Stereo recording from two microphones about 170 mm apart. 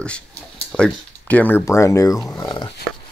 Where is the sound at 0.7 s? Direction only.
5° left (ahead or behind).